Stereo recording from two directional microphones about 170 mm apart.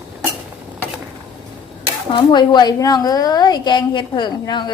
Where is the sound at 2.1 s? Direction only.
25° left (ahead or behind).